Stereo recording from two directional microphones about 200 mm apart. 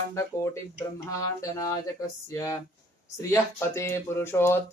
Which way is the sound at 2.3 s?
15° left (ahead or behind).